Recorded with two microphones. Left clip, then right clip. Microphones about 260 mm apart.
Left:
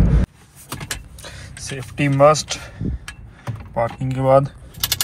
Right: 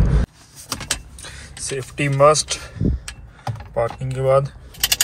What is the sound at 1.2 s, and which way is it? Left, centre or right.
Speech, centre.